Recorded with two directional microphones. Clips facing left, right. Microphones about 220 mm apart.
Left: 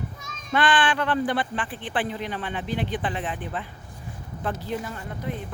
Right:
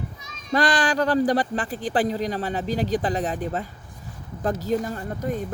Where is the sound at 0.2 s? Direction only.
50° left (ahead or behind).